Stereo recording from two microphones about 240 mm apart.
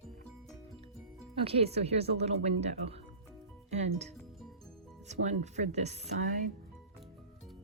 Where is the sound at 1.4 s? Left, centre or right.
Right.